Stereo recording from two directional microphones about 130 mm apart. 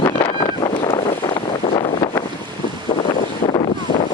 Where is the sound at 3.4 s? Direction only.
50° left (ahead or behind).